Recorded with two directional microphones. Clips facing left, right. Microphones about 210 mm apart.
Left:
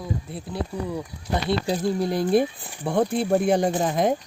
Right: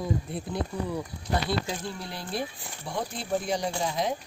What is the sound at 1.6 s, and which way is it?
Speech, 40° left (ahead or behind).